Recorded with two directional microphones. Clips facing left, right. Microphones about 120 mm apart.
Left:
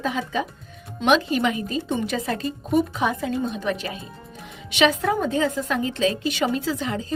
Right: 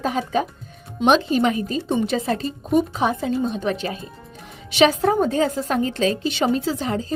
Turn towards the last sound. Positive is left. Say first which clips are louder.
# right 3 dB
turn(degrees=-35)  # may be behind; listen again after turning